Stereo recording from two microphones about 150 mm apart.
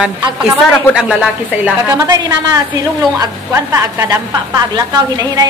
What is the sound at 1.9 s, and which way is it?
A woman's voice, 20° right (ahead or behind).